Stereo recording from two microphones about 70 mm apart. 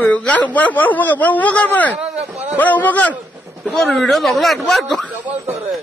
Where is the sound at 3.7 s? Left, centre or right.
Centre.